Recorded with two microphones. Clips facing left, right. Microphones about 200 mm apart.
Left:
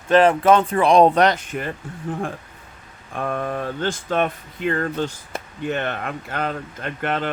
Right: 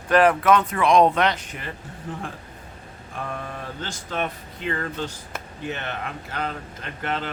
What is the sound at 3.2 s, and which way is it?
Speech, 55° left (ahead or behind).